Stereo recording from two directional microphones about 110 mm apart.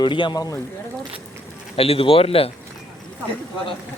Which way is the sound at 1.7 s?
60° left (ahead or behind).